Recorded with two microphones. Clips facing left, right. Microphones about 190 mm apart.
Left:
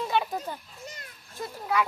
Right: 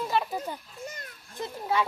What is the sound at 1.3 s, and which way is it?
Speech, 25° right (ahead or behind).